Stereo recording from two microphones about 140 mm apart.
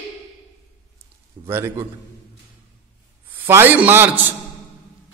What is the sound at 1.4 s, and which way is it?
Speech, 20° right (ahead or behind).